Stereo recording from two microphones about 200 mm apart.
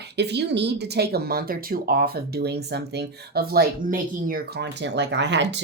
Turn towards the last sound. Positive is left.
turn(degrees=-60)  # may be behind; listen again after turning